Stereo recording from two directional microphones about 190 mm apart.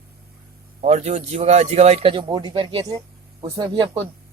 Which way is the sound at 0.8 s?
35° right (ahead or behind).